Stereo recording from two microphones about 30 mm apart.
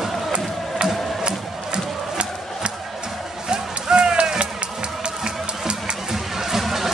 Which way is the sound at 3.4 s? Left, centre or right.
Right.